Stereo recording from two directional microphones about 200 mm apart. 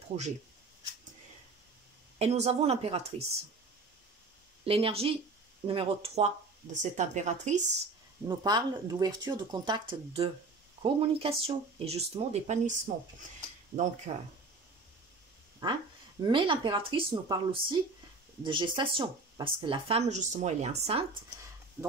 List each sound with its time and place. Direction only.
0.1 s speech: 40° right (ahead or behind)
2.1 s speech: 30° right (ahead or behind)
4.6 s speech: 30° right (ahead or behind)
8.3 s speech: 20° right (ahead or behind); by 12.9 s 35° right (ahead or behind)
14.1 s speech: 30° right (ahead or behind)
15.6 s speech: 25° right (ahead or behind)
21.8 s a sound: 10° right (ahead or behind)